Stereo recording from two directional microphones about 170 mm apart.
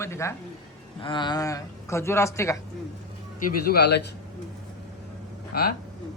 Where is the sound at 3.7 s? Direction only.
75° left (ahead or behind).